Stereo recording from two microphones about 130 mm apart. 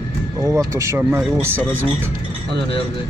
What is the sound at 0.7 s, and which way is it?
Speech, 20° right (ahead or behind).